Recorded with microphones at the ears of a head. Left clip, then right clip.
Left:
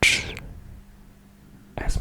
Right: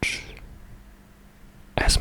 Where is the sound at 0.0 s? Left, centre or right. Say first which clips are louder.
Left 9 dB; left.